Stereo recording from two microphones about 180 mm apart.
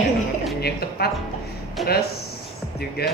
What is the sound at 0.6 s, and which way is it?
Speech, 60° left (ahead or behind).